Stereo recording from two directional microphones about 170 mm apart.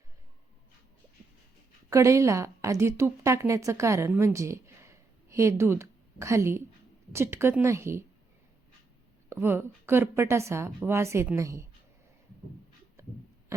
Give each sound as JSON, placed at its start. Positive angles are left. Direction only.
{"t": 1.9, "sound": "a woman's voice", "side_deg": -20}
{"t": 9.3, "sound": "a woman's voice", "side_deg": -15}
{"t": 13.0, "sound": "writing", "side_deg": -15}